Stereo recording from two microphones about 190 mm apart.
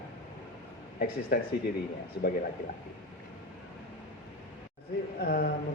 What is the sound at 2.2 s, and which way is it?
Speech, 65° left (ahead or behind).